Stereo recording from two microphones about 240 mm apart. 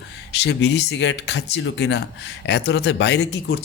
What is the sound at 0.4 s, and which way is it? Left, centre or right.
Speech, left.